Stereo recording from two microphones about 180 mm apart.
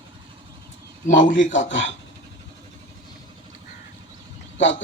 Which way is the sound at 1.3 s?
90° left.